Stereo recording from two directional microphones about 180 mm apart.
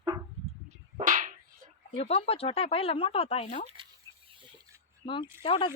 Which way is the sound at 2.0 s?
35° left (ahead or behind).